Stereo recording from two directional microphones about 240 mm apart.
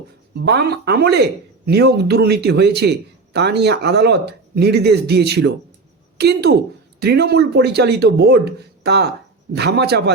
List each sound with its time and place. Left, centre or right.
0.3 s speech: right